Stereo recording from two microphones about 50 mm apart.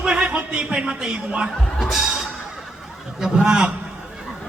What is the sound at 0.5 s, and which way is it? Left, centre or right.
Speech, centre.